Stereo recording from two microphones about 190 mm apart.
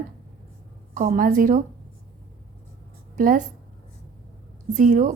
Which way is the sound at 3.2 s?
45° right (ahead or behind).